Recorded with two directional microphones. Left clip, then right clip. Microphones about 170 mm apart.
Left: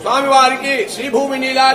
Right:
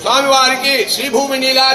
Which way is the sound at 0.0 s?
10° right (ahead or behind).